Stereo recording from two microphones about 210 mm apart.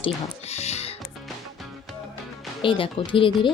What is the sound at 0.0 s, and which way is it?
Speech, 30° left (ahead or behind).